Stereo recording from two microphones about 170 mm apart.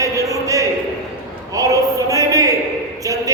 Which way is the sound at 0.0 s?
20° right (ahead or behind).